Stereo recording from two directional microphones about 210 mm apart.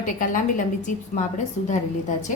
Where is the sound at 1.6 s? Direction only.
35° left (ahead or behind).